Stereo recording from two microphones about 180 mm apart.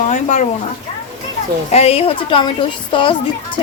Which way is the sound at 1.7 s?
35° left (ahead or behind).